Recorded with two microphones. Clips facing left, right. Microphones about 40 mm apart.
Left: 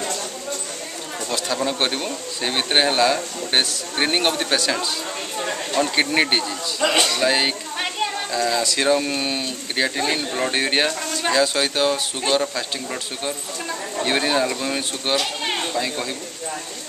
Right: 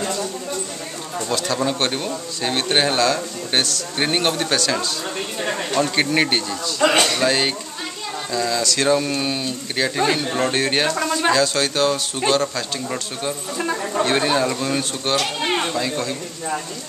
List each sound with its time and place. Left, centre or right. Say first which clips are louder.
1.3 s a man's voice: right 2 dB; centre
5.4 s speech: right 2 dB; right
5.8 s speech: even; centre
6.8 s music: right 3 dB; centre
7.2 s a man's voice: even; centre
11.0 s speech: right 6 dB; right
11.3 s a man's voice: right 1 dB; centre
13.6 s speech: right 9 dB; right
14.0 s a man's voice: even; centre